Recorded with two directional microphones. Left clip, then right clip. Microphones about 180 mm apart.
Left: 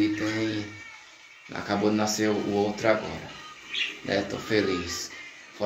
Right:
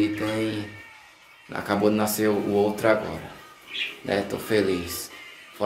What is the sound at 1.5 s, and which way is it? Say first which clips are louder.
Speech: right 3 dB; 15° right (ahead or behind).